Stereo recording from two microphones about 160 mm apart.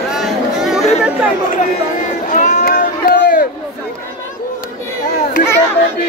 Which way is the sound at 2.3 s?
50° left (ahead or behind).